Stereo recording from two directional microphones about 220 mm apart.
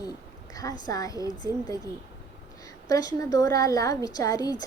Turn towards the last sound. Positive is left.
turn(degrees=15)  # may be behind; listen again after turning